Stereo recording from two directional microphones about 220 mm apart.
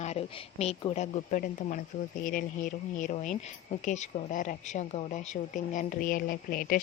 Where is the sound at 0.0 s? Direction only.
30° left (ahead or behind).